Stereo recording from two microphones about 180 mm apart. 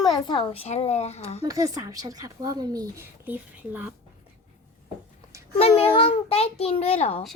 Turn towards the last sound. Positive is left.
turn(degrees=35)  # may be behind; listen again after turning